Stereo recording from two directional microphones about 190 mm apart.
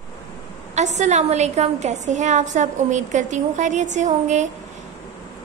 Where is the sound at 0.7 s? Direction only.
35° right (ahead or behind).